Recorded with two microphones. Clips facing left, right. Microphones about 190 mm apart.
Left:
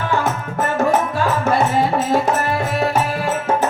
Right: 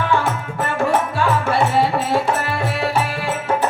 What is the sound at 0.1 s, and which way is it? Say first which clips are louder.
Music: even; 40° left (ahead or behind).